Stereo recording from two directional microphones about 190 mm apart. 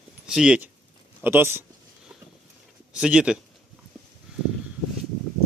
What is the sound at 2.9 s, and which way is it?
Speech, 5° right (ahead or behind).